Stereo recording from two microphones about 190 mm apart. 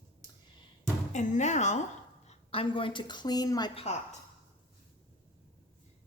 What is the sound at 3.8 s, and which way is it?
Speech, 35° left (ahead or behind).